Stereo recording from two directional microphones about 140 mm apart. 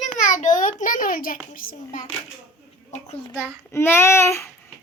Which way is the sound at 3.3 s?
20° left (ahead or behind).